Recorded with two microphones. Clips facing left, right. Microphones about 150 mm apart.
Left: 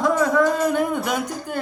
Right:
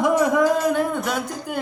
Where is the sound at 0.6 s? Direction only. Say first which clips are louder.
Even; centre (ahead or behind).